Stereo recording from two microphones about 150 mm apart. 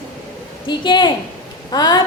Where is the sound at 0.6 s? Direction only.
30° left (ahead or behind).